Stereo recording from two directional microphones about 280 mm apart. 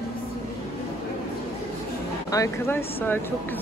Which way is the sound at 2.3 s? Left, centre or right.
Centre.